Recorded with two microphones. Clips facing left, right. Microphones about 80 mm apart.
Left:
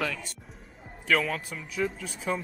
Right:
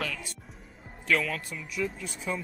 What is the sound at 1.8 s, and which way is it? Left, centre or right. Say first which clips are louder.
Speech: left 3 dB; left.